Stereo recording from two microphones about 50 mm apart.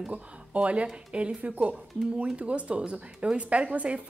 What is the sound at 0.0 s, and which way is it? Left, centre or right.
A woman's voice, right.